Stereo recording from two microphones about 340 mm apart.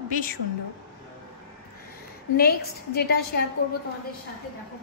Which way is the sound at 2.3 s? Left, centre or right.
Left.